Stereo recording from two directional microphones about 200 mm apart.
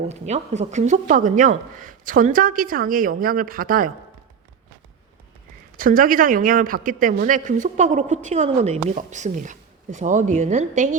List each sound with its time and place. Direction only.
0.1 s speech: 35° right (ahead or behind)
5.7 s speech: 45° right (ahead or behind)